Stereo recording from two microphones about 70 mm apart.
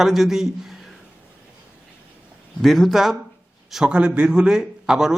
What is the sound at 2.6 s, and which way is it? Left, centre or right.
A man's voice, centre.